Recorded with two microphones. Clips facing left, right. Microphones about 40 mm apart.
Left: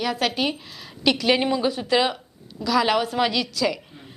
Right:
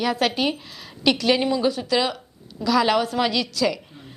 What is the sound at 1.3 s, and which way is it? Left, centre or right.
Speech, centre.